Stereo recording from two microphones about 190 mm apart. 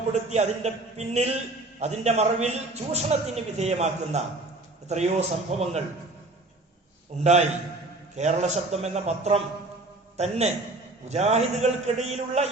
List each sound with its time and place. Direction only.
0.1 s a man's voice: 35° right (ahead or behind)
8.1 s a man's voice: 35° right (ahead or behind)